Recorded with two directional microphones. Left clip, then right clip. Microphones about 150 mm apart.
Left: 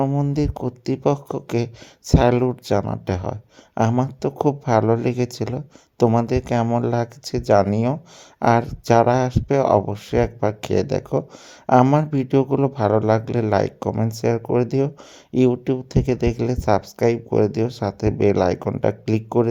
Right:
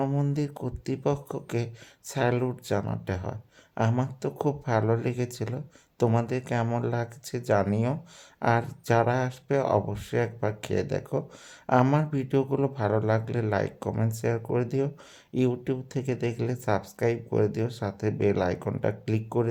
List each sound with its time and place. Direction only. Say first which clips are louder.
0.0 s speech: left 7 dB; 25° left (ahead or behind)